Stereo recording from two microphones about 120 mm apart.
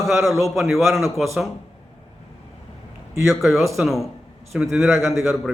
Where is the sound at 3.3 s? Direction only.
Centre (ahead or behind).